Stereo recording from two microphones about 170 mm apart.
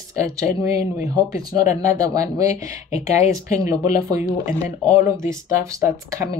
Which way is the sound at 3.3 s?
20° right (ahead or behind).